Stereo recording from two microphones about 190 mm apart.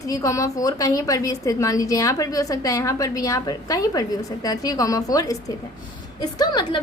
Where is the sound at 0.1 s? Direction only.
15° left (ahead or behind).